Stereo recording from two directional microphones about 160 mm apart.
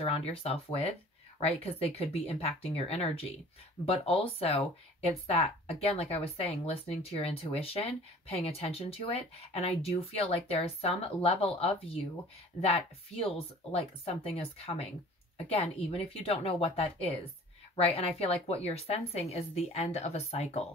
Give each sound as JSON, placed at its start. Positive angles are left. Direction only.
{"t": 0.0, "sound": "speech", "side_deg": 40}